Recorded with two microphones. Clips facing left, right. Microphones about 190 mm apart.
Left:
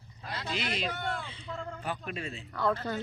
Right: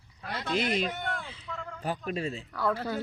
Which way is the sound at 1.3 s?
Centre (ahead or behind).